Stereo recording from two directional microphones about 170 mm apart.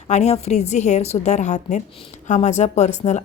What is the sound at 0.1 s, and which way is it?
A woman's voice, 40° left (ahead or behind).